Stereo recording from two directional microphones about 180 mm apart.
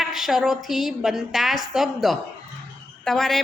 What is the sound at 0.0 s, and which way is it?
A woman's voice, centre (ahead or behind).